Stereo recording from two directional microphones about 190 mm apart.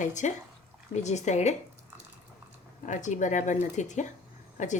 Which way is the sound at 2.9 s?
40° left (ahead or behind).